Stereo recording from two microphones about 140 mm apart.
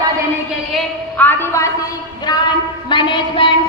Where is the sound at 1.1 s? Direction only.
15° left (ahead or behind).